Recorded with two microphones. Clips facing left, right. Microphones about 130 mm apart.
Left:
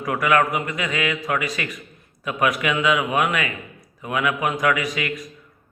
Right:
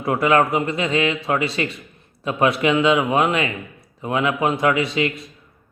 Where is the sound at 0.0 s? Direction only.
30° right (ahead or behind).